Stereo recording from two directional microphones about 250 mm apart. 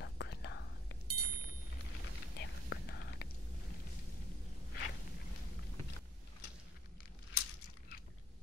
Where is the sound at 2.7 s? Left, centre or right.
Left.